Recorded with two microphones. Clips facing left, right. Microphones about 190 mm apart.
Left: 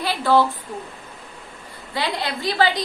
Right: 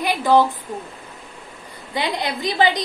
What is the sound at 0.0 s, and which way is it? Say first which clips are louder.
Speech: right 2 dB; 15° right (ahead or behind).